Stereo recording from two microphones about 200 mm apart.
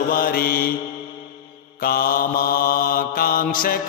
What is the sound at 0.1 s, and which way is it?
Mantra, 45° left (ahead or behind).